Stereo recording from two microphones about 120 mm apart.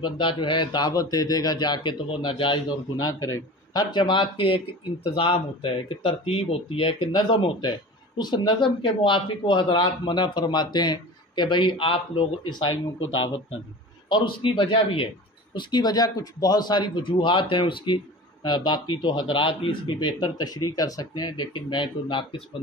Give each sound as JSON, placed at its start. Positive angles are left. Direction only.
{"t": 0.0, "sound": "a man's voice", "side_deg": 45}
{"t": 3.0, "sound": "a man's voice", "side_deg": 30}
{"t": 14.0, "sound": "speech", "side_deg": 40}
{"t": 15.5, "sound": "a man's voice", "side_deg": 35}